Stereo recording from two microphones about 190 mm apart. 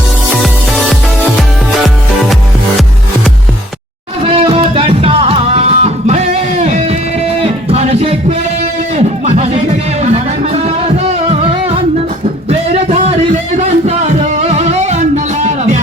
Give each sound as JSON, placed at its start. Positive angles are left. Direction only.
{"t": 0.4, "sound": "music", "side_deg": 0}
{"t": 4.2, "sound": "music", "side_deg": -30}
{"t": 9.0, "sound": "a sound", "side_deg": -35}
{"t": 10.0, "sound": "music", "side_deg": -35}